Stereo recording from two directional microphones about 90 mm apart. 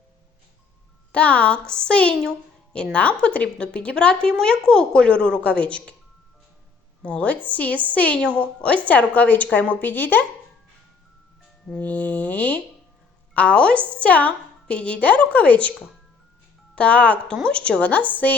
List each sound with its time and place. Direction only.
1.1 s a woman's voice: 15° left (ahead or behind)
7.0 s a woman's voice: 15° left (ahead or behind)
11.8 s a woman's voice: 15° left (ahead or behind)